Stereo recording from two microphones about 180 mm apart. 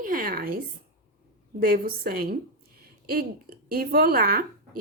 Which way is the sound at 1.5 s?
55° right (ahead or behind).